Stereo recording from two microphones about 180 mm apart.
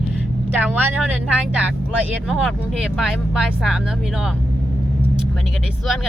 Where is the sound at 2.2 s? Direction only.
Centre (ahead or behind).